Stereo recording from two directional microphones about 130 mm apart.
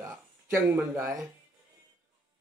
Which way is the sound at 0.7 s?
20° right (ahead or behind).